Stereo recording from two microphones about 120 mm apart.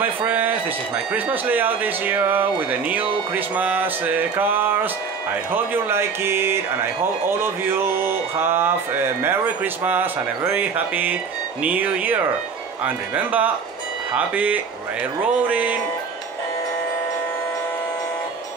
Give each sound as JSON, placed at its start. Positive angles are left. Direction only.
{"t": 0.0, "sound": "speech", "side_deg": -15}